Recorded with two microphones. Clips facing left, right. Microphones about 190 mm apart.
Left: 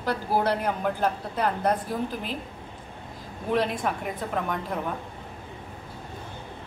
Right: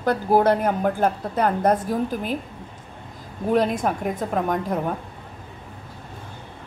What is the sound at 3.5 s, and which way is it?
A woman's voice, 45° right (ahead or behind).